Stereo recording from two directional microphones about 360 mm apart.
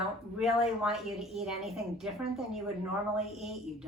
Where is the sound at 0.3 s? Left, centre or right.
Centre.